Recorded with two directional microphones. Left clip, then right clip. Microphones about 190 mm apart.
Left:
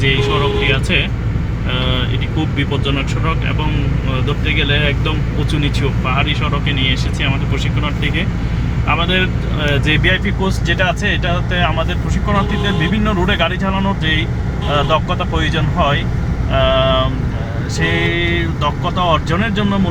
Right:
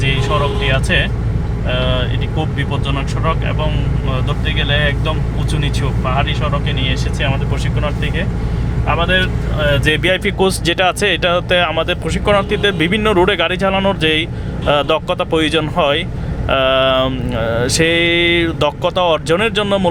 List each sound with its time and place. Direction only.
0.7 s speech: centre (ahead or behind)
8.9 s speech: centre (ahead or behind)
10.0 s speech: 60° right (ahead or behind)